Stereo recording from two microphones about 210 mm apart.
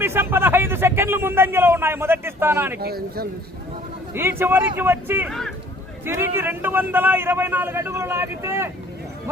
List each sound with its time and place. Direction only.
0.0 s a man's voice: 10° right (ahead or behind)
2.7 s speech: 50° right (ahead or behind)
4.1 s a man's voice: 10° right (ahead or behind)
5.3 s speech: centre (ahead or behind)
6.1 s a man's voice: 10° right (ahead or behind)